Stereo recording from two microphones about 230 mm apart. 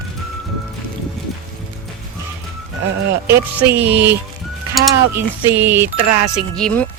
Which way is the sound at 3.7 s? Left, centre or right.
Centre.